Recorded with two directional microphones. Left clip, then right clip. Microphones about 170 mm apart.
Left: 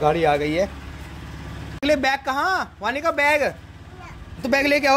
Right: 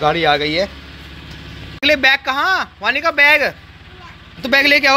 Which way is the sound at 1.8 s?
10° left (ahead or behind).